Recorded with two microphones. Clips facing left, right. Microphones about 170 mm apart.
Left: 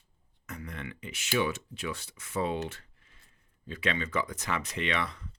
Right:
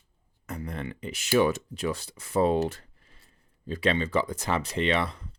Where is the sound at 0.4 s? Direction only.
35° right (ahead or behind).